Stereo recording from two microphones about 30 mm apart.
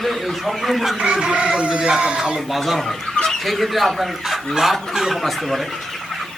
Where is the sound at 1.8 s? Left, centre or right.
Right.